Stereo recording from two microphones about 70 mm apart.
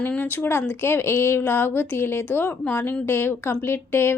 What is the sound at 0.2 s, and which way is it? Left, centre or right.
A woman's voice, left.